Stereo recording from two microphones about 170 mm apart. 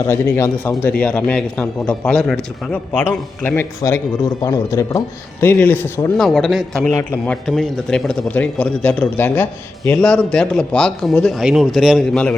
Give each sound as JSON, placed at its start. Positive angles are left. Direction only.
{"t": 0.3, "sound": "a man's voice", "side_deg": 15}
{"t": 6.1, "sound": "a man's voice", "side_deg": 0}
{"t": 6.9, "sound": "a man's voice", "side_deg": 15}
{"t": 7.4, "sound": "a man's voice", "side_deg": 0}